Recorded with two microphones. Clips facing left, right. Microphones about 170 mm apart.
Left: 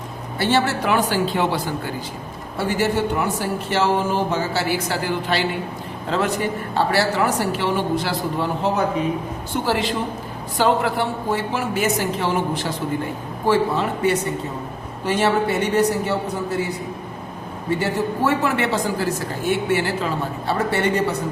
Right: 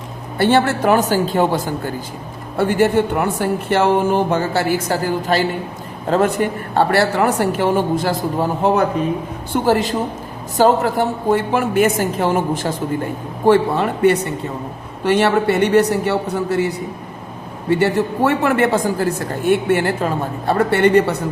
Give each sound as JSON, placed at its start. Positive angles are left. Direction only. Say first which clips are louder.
{"t": 0.3, "sound": "a woman's voice", "louder": "right 5 dB", "side_deg": -55}
{"t": 17.7, "sound": "speech", "louder": "right 6 dB", "side_deg": -65}